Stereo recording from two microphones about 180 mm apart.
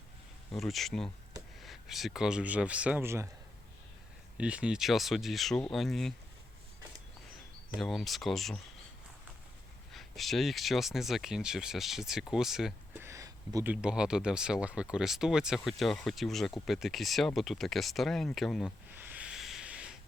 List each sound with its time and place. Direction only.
0.5 s speech: centre (ahead or behind)
4.4 s speech: 5° right (ahead or behind)
7.8 s speech: centre (ahead or behind)
9.9 s speech: centre (ahead or behind)
12.9 s a sound: 15° right (ahead or behind)
13.8 s speech: 5° right (ahead or behind)
18.9 s hiss: 10° right (ahead or behind)